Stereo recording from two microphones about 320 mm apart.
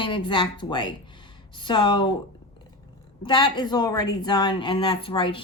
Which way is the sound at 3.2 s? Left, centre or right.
Centre.